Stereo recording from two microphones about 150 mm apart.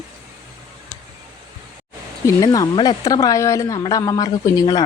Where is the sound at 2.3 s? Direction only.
25° left (ahead or behind).